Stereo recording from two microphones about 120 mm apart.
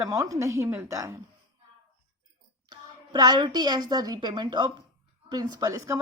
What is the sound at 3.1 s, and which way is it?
A woman's voice, 35° right (ahead or behind).